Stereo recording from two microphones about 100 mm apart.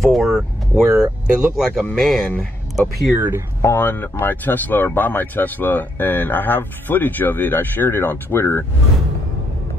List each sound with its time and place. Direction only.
0.0 s speech: centre (ahead or behind)
3.2 s speech: 20° right (ahead or behind)
3.6 s speech: 20° left (ahead or behind)